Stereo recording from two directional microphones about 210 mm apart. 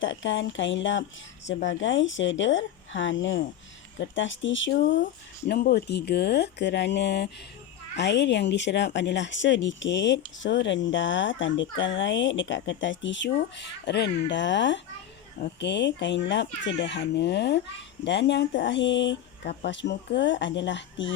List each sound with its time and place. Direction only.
0.0 s speech: 65° left (ahead or behind)
5.5 s speech: 50° left (ahead or behind)